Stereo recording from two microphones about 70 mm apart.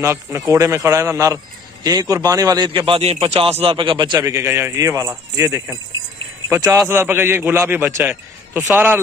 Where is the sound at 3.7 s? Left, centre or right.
Right.